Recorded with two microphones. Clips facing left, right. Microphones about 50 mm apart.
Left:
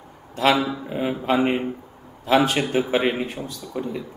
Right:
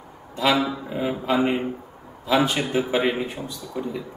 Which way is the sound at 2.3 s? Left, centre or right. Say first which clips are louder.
Left 2 dB; centre.